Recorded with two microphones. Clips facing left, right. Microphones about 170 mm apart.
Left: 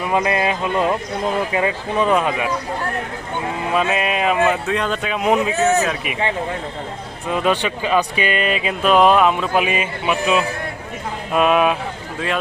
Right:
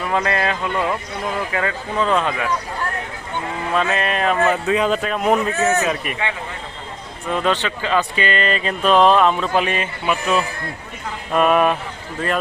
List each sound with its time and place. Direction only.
0.0 s speech: 15° left (ahead or behind)
3.7 s speech: 10° left (ahead or behind)
7.3 s speech: 10° left (ahead or behind)